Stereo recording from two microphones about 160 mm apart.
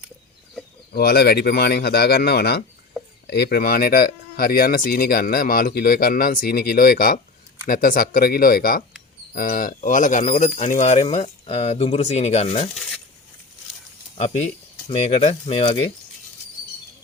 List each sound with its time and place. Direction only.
0.9 s speech: 85° left; by 12.7 s 45° left (ahead or behind)
15.0 s speech: 40° left (ahead or behind)